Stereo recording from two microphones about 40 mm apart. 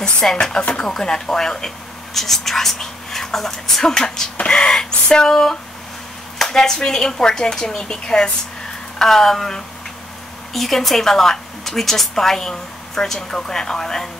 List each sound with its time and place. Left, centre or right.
0.4 s a woman's voice: left